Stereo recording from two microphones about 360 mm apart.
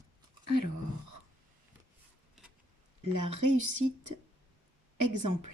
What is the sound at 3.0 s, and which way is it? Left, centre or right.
Speech, right.